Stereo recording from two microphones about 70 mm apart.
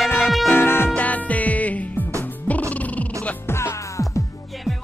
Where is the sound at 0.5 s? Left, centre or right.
Left.